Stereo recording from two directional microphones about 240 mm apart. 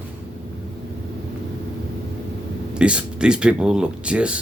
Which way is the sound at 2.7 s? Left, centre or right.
Centre.